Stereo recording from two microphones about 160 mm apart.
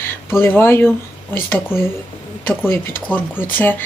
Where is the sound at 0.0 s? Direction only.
15° left (ahead or behind).